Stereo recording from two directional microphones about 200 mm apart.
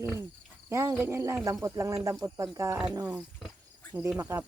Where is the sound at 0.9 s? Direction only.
15° right (ahead or behind).